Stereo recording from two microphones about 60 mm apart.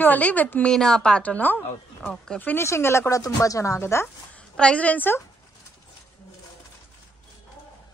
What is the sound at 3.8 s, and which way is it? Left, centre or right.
Speech, left.